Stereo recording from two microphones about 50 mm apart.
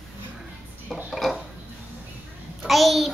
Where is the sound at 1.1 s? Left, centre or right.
Centre.